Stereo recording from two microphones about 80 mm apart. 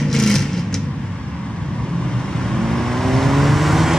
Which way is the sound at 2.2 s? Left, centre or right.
Centre.